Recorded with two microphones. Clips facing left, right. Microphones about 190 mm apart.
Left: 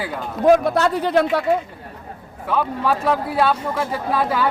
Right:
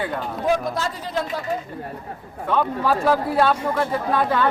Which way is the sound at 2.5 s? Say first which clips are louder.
Even; centre (ahead or behind).